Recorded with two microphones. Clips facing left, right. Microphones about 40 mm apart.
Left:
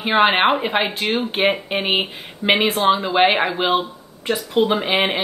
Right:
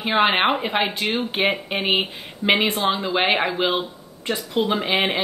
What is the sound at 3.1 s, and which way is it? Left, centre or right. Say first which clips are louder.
Speech: left 4 dB; centre.